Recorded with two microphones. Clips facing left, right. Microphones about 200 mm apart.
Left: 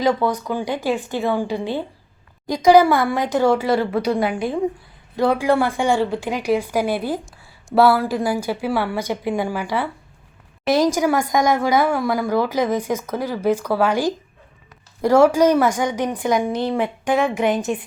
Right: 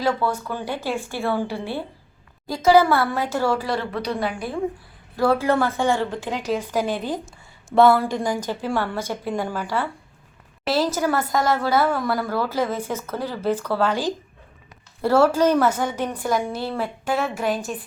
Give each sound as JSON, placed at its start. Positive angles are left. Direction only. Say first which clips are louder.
{"t": 0.0, "sound": "a woman's voice", "louder": "left 4 dB", "side_deg": 15}
{"t": 5.1, "sound": "a woman's voice", "louder": "left 2 dB", "side_deg": 15}